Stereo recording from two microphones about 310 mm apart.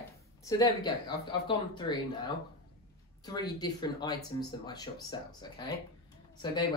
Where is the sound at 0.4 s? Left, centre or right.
Centre.